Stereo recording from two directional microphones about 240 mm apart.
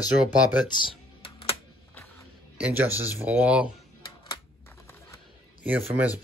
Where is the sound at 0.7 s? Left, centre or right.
Left.